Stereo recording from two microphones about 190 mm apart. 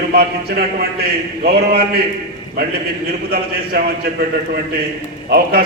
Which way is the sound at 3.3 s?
50° right (ahead or behind).